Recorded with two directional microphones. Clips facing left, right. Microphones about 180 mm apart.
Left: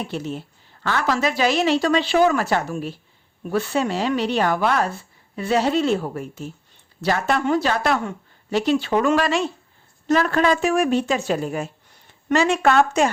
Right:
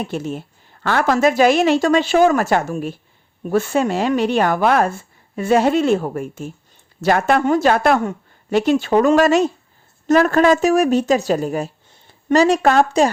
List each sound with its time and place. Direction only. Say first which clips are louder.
0.1 s a woman's voice: right 3 dB; 50° right (ahead or behind)